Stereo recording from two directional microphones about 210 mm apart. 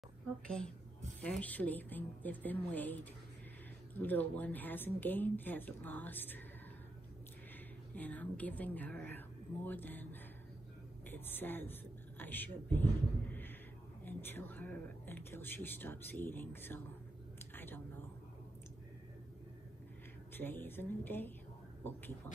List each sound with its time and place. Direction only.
1.2 s speech: 5° left (ahead or behind)
7.9 s speech: 10° left (ahead or behind)
11.1 s a woman's voice: 10° left (ahead or behind)
14.0 s speech: 10° left (ahead or behind)
17.6 s a sound: 10° left (ahead or behind)
20.3 s speech: 10° left (ahead or behind)